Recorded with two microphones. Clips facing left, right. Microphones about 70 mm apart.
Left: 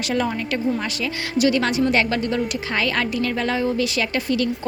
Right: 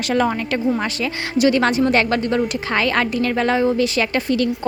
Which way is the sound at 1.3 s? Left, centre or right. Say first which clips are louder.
Right 3 dB; right.